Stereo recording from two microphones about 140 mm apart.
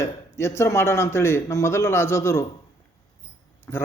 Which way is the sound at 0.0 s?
20° left (ahead or behind).